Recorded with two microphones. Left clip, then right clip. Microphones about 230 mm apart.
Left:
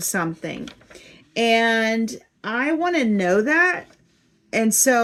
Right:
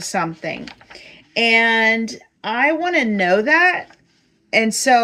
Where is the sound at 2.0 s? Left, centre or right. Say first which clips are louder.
Right 4 dB; centre.